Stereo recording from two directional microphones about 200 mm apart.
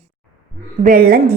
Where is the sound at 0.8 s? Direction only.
45° right (ahead or behind).